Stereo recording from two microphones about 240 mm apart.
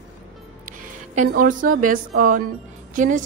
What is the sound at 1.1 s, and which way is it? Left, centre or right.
A woman's voice, right.